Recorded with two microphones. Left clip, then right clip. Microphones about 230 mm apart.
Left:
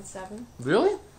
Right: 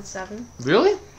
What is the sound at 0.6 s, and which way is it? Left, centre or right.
Speech, centre.